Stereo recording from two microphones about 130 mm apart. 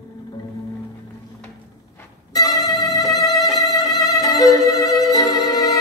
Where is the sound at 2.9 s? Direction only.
30° left (ahead or behind).